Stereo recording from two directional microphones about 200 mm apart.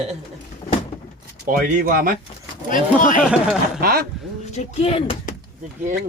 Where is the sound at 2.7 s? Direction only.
40° left (ahead or behind).